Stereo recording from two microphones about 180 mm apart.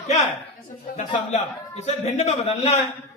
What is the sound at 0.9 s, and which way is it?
A man's voice, 40° left (ahead or behind).